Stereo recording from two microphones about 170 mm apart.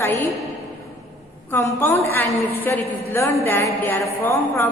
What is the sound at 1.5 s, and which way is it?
A woman's voice, 15° left (ahead or behind).